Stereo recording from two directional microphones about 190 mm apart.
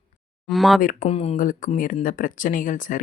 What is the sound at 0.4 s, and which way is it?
Speech, centre (ahead or behind).